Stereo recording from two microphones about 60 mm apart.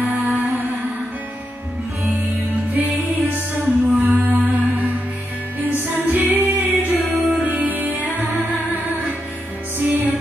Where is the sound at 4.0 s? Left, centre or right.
Right.